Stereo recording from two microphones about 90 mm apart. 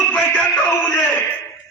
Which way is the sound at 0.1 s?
20° left (ahead or behind).